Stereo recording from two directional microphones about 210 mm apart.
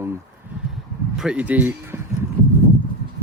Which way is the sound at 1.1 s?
5° right (ahead or behind).